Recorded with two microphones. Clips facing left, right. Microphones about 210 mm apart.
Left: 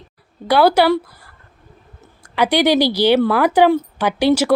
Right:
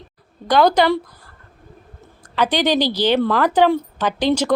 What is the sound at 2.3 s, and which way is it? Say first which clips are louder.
Speech: left 3 dB; 10° left (ahead or behind).